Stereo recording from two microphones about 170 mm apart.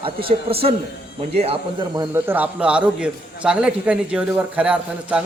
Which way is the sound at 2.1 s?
10° right (ahead or behind).